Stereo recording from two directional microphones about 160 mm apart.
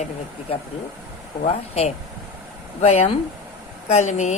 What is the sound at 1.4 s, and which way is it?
Speech, 40° left (ahead or behind).